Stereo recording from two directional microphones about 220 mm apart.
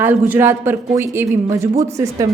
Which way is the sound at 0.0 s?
10° right (ahead or behind).